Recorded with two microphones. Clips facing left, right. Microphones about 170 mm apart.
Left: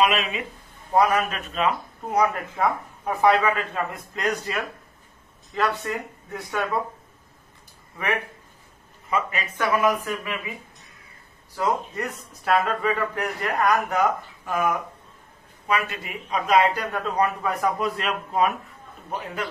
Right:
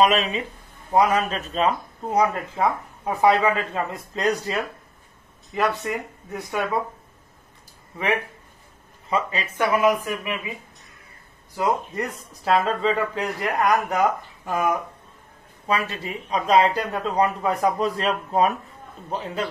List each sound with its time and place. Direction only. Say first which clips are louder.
0.0 s a man's voice: right 3 dB; 35° right (ahead or behind)
0.9 s speech: right 1 dB; 20° right (ahead or behind)
1.3 s speech: right 2 dB; 35° right (ahead or behind)
6.5 s speech: right 1 dB; 15° right (ahead or behind)
9.1 s speech: right 1 dB; 30° right (ahead or behind)
12.4 s a man's voice: right 2 dB; 25° right (ahead or behind)
19.0 s speech: right 3 dB; 25° right (ahead or behind)